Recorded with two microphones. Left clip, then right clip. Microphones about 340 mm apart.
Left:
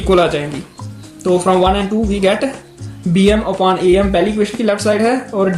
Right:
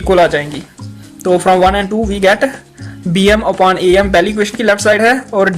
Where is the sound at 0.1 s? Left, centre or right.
Right.